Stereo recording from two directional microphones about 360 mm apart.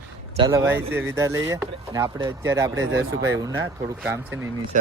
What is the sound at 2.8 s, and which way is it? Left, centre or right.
Speech, right.